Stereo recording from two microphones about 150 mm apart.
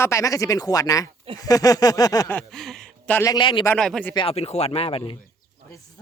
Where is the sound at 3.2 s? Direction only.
25° left (ahead or behind).